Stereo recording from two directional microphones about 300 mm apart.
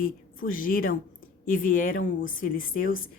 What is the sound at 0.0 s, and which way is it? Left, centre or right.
Speech, left.